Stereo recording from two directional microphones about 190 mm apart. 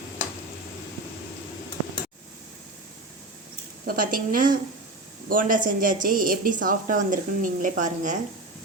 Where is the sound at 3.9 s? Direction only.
45° right (ahead or behind).